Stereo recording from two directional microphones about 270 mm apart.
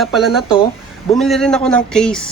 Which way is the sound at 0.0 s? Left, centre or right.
Centre.